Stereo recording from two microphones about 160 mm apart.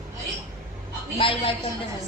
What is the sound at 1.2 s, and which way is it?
Speech, 35° left (ahead or behind).